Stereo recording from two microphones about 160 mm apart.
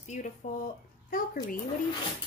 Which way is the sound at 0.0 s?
45° left (ahead or behind).